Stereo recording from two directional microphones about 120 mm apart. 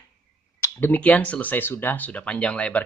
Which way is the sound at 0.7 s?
15° left (ahead or behind).